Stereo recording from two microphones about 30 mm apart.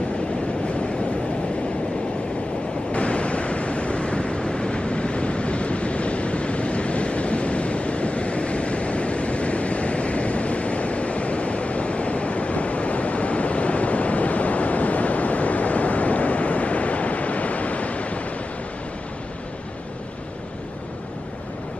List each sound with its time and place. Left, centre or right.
2.9 s waves: left